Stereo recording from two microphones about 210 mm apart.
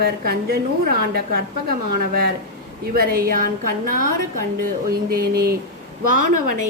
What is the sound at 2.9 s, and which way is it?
A woman's voice, 45° right (ahead or behind).